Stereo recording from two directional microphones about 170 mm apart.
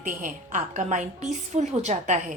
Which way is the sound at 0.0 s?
50° right (ahead or behind).